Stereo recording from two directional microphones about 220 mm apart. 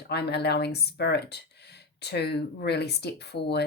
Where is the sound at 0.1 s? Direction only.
50° left (ahead or behind).